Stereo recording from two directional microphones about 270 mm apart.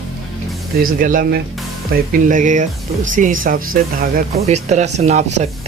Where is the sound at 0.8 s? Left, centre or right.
Right.